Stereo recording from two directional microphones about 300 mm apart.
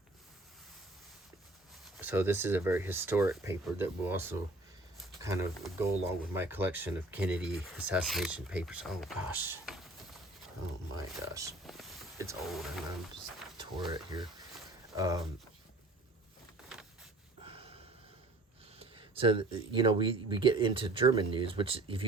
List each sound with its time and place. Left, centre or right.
2.0 s speech: centre
10.9 s speech: centre
13.6 s speech: centre
16.6 s a sound: centre
17.4 s a sound: centre
18.8 s speech: centre